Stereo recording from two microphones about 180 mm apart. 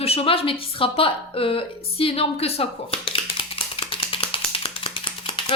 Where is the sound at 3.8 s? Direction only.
30° left (ahead or behind).